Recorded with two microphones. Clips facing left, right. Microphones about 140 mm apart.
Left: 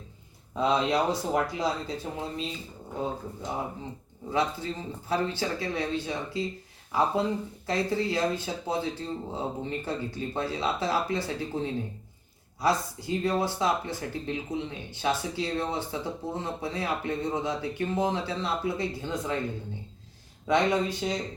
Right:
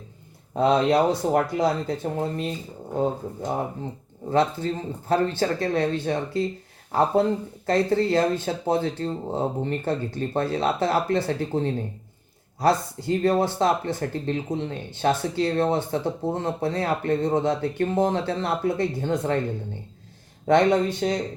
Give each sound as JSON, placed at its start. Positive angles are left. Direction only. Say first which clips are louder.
{"t": 0.5, "sound": "speech", "louder": "right 6 dB", "side_deg": -50}
{"t": 20.5, "sound": "speech", "louder": "right 6 dB", "side_deg": -55}